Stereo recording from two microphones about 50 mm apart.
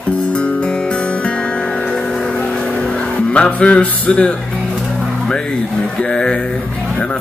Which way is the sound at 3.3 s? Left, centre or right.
Left.